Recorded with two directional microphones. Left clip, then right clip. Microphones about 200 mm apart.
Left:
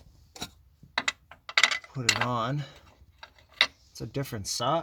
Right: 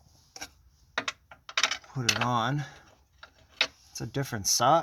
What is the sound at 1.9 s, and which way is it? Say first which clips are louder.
Speech: even; 15° right (ahead or behind).